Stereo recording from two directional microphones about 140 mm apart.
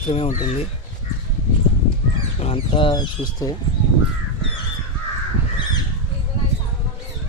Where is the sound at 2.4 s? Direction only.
40° left (ahead or behind).